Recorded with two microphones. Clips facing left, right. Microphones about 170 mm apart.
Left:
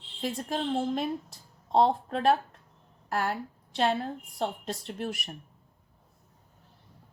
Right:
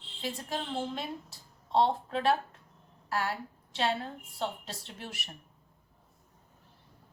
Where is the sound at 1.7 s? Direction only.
45° left (ahead or behind).